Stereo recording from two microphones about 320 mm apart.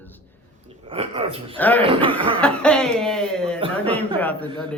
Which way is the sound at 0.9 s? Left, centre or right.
Centre.